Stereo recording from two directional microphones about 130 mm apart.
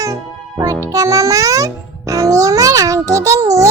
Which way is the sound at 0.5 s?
25° right (ahead or behind).